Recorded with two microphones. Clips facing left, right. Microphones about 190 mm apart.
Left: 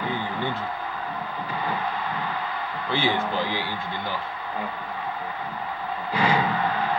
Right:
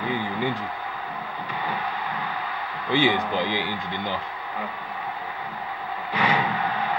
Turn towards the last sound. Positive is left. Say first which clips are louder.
# left 1 dB
turn(degrees=30)  # may be behind; listen again after turning